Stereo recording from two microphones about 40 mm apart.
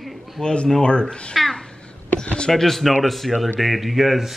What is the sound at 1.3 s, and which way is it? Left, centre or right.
Babbling, centre.